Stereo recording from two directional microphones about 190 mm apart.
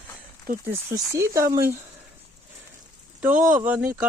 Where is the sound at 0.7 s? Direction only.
15° right (ahead or behind).